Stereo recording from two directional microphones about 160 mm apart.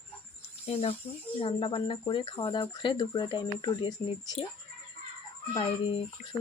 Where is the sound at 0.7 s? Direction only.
35° left (ahead or behind).